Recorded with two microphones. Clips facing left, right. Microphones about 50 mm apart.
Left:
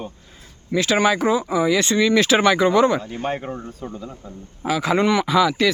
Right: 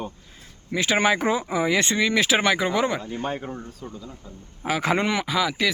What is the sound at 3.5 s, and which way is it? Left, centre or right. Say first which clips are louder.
Speech: left 4 dB; left.